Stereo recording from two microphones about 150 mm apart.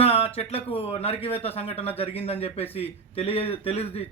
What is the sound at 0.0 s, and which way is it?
Music, 40° left (ahead or behind).